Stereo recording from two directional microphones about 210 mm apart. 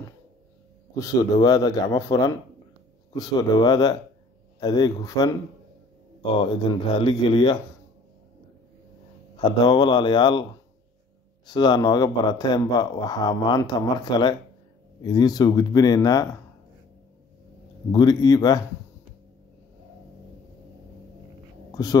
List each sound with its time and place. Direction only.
0.9 s a man's voice: 15° left (ahead or behind)
9.4 s speech: 20° left (ahead or behind)
11.4 s a man's voice: 20° left (ahead or behind)
17.9 s speech: 20° left (ahead or behind)